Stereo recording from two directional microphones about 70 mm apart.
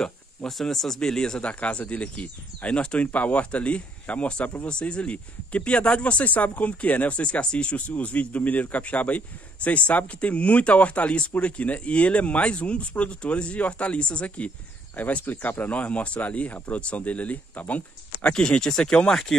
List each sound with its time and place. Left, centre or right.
0.0 s speech: centre